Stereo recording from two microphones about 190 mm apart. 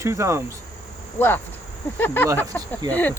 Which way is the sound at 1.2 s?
10° left (ahead or behind).